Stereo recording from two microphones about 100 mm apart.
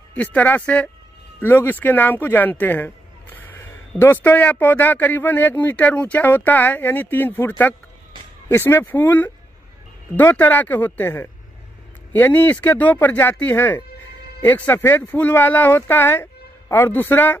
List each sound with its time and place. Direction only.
0.1 s speech: 15° left (ahead or behind)
3.3 s a sound: 25° left (ahead or behind)
4.0 s speech: 20° left (ahead or behind)